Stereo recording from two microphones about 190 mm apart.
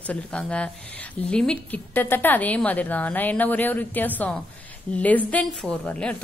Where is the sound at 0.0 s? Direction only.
5° left (ahead or behind).